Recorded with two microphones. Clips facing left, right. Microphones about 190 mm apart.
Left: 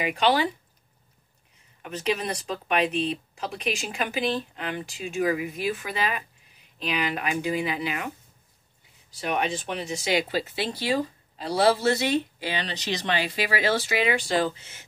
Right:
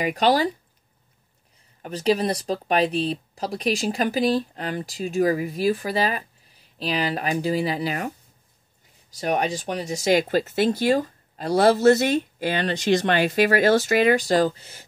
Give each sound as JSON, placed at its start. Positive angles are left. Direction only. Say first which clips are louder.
{"t": 0.0, "sound": "speech", "louder": "right 3 dB", "side_deg": -40}
{"t": 1.8, "sound": "speech", "louder": "right 6 dB", "side_deg": -35}
{"t": 9.1, "sound": "speech", "louder": "right 3 dB", "side_deg": -40}